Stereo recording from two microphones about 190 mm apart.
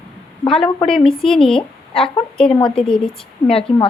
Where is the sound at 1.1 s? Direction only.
5° left (ahead or behind).